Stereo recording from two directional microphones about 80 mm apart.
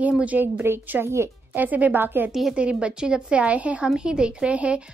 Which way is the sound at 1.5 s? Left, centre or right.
Right.